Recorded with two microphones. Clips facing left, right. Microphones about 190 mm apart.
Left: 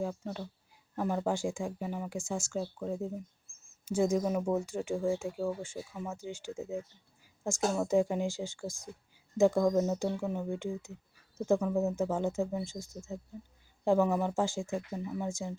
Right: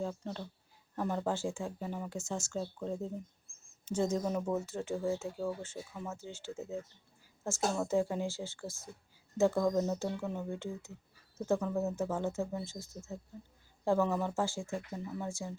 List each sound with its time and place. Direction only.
0.0 s speech: 10° left (ahead or behind)